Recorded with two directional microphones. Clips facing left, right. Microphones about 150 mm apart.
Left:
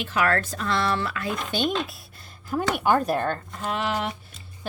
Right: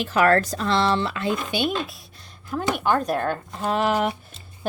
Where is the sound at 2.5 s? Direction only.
5° left (ahead or behind).